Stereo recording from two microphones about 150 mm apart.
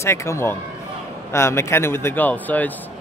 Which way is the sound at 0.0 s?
20° left (ahead or behind).